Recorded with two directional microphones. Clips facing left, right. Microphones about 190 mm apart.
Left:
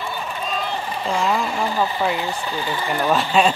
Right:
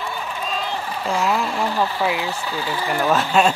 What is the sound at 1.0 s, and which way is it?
Speech, 5° right (ahead or behind).